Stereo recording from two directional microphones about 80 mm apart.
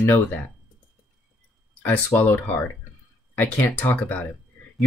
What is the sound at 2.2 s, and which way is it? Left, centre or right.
Speech, left.